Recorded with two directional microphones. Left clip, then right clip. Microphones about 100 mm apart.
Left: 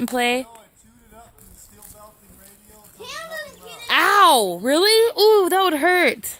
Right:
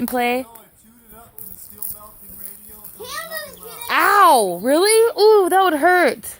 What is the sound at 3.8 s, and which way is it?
Music, 20° left (ahead or behind).